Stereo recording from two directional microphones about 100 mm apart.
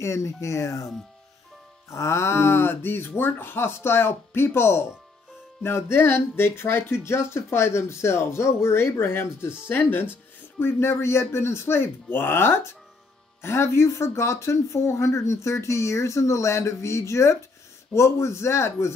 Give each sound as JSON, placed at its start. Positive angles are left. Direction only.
{"t": 0.0, "sound": "speech", "side_deg": 30}
{"t": 1.9, "sound": "speech", "side_deg": 30}